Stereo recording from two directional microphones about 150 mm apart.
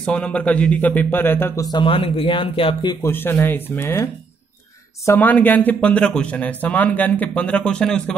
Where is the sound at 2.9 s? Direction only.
15° left (ahead or behind).